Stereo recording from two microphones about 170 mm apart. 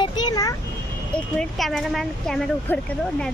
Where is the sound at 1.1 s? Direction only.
5° left (ahead or behind).